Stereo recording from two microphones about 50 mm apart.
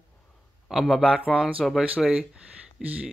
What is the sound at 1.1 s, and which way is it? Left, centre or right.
Speech, centre.